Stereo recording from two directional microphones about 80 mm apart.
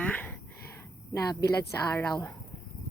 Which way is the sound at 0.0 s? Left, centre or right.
Left.